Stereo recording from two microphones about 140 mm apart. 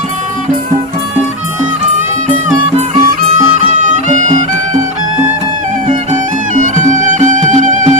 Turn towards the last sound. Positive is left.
turn(degrees=-60)  # may be behind; listen again after turning